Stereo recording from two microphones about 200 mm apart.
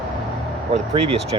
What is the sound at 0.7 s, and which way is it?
Speech, 30° right (ahead or behind).